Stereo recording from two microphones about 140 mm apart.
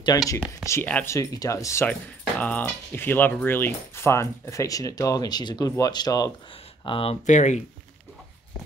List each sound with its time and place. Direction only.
0.1 s speech: 25° left (ahead or behind)
1.9 s speech: 10° left (ahead or behind); by 6.3 s 30° left (ahead or behind)
6.8 s speech: 40° left (ahead or behind)
7.2 s speech: 60° left (ahead or behind)